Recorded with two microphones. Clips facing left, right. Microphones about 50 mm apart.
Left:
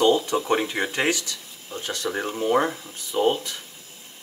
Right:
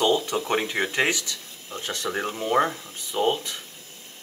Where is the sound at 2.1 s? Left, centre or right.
Centre.